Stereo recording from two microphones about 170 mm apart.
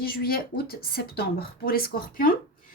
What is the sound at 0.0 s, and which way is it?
A woman's voice, 60° left (ahead or behind).